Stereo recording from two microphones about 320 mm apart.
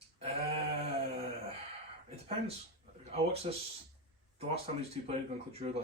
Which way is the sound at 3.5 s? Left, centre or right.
Centre.